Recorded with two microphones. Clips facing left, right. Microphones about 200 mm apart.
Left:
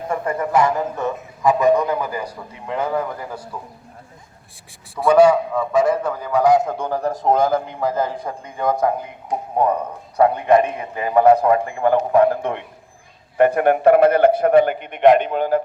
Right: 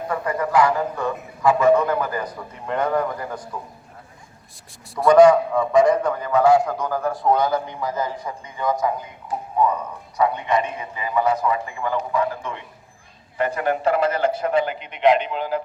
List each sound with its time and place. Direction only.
0.1 s a man's voice: 25° left (ahead or behind); by 3.5 s 5° left (ahead or behind)
4.9 s a man's voice: 5° left (ahead or behind)
6.4 s a man's voice: 20° left (ahead or behind); by 15.6 s 50° left (ahead or behind)